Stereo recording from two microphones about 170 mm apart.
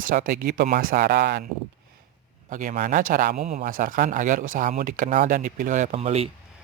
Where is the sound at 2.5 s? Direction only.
50° right (ahead or behind).